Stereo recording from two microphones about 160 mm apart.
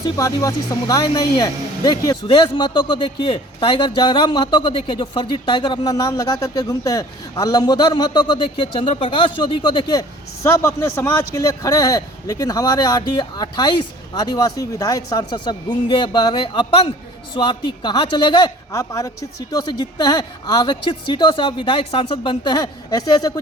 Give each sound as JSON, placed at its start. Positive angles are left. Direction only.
{"t": 0.0, "sound": "speech", "side_deg": 20}